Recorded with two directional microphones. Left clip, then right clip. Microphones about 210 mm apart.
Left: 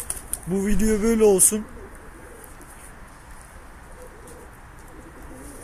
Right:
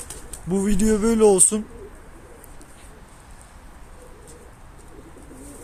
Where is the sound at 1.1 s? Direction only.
20° right (ahead or behind).